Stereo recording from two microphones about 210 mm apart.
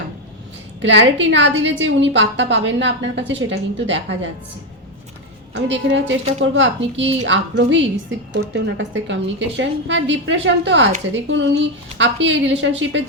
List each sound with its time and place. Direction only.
0.8 s a woman's voice: 60° right (ahead or behind)
5.5 s a woman's voice: 60° right (ahead or behind)